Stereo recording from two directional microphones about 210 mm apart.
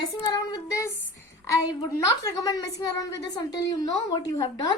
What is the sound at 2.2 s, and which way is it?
A woman's voice, 15° left (ahead or behind).